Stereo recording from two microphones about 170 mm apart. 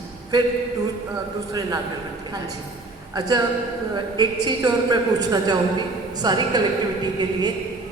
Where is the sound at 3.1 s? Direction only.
20° right (ahead or behind).